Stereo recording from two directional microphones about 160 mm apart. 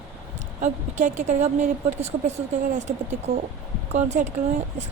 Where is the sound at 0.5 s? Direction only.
50° right (ahead or behind).